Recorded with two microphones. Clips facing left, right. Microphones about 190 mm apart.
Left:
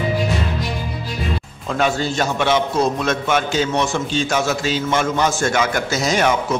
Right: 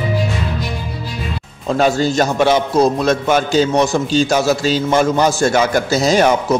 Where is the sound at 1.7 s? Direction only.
35° right (ahead or behind).